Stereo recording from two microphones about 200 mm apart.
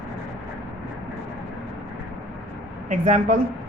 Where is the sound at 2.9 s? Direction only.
40° right (ahead or behind).